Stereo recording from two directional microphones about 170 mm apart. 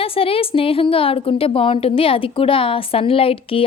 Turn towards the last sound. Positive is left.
turn(degrees=35)  # may be behind; listen again after turning